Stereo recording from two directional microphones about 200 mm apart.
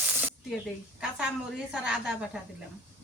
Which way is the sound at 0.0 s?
10° right (ahead or behind).